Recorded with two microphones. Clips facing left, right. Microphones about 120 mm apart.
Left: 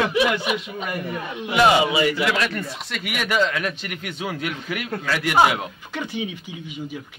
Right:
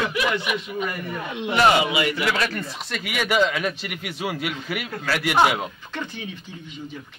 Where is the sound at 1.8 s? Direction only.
30° left (ahead or behind).